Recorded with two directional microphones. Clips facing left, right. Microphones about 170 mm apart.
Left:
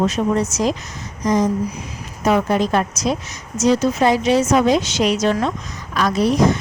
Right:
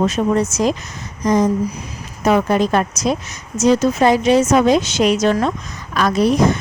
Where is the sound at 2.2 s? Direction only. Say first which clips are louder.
Right 2 dB; 55° right (ahead or behind).